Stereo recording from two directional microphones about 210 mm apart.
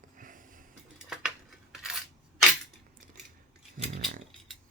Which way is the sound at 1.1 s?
Centre (ahead or behind).